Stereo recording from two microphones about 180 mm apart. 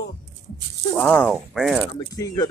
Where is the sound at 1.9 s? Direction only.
20° left (ahead or behind).